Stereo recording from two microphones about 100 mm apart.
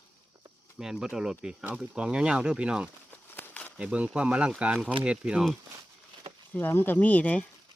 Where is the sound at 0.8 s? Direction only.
5° right (ahead or behind).